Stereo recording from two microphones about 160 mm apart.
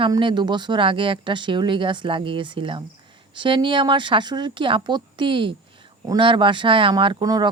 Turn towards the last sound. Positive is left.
turn(degrees=-25)  # may be behind; listen again after turning